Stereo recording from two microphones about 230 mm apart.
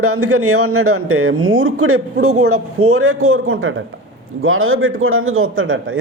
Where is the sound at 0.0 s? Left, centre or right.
Right.